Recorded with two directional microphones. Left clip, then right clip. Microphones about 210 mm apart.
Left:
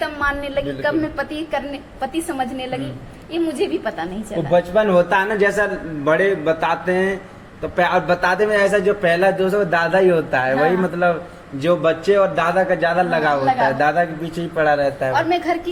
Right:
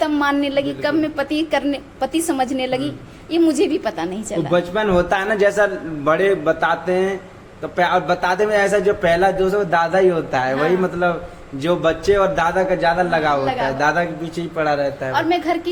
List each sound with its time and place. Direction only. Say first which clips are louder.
0.0 s a woman's voice: right 3 dB; 45° right (ahead or behind)
0.8 s a woman's voice: right 1 dB; 30° right (ahead or behind)
1.4 s a woman's voice: right 5 dB; 50° right (ahead or behind)
4.5 s a man's voice: left 3 dB; 15° right (ahead or behind)